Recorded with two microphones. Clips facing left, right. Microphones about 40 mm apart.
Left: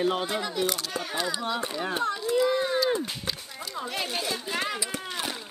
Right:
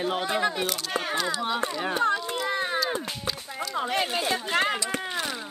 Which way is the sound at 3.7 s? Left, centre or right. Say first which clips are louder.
Right 6 dB; right.